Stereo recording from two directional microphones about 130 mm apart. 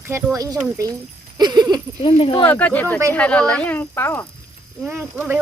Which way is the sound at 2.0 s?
45° left (ahead or behind).